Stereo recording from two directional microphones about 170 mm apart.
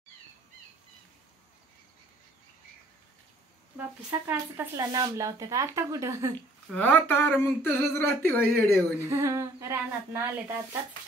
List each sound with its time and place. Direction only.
4.3 s speech: 15° right (ahead or behind)
6.7 s a sound: 10° left (ahead or behind)
9.1 s speech: 15° right (ahead or behind)